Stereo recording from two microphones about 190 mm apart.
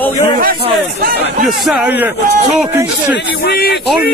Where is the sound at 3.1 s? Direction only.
55° left (ahead or behind).